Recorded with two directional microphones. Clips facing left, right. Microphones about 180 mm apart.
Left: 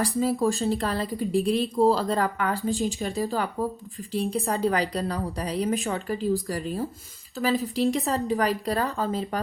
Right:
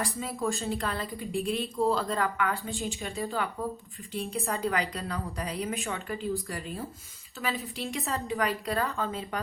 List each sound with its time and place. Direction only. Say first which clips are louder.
0.0 s a woman's voice: left 8 dB; 35° left (ahead or behind)